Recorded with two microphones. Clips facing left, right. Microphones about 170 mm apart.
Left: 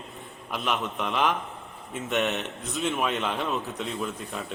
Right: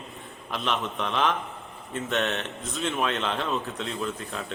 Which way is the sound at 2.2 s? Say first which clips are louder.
Left 1 dB; 10° left (ahead or behind).